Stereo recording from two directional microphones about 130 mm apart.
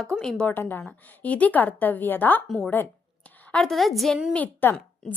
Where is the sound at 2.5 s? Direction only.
Centre (ahead or behind).